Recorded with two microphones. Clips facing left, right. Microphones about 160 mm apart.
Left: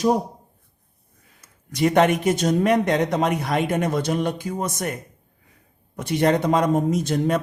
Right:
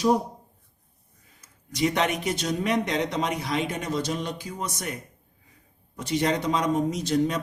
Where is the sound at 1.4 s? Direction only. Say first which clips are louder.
Left 4 dB; 55° left (ahead or behind).